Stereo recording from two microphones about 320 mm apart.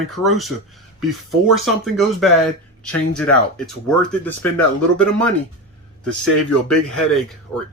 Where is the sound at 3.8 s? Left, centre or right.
Centre.